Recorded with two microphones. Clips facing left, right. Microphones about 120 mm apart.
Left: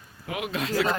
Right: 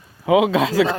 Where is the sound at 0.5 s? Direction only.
90° right.